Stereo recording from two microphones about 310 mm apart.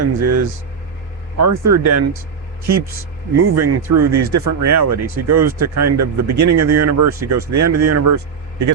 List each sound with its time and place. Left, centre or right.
0.0 s speech: right
1.4 s speech: right
3.3 s speech: right